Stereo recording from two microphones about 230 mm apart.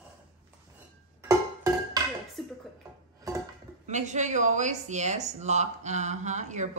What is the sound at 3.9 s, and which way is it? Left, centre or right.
Speech, right.